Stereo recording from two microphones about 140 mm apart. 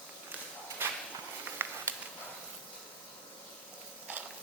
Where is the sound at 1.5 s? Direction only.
15° right (ahead or behind).